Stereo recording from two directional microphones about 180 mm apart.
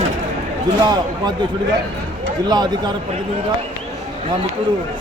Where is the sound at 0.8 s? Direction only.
20° right (ahead or behind).